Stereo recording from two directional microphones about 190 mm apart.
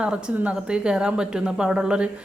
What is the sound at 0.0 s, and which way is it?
A woman's voice, 5° right (ahead or behind).